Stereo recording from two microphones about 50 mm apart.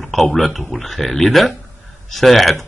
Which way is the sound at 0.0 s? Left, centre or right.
Centre.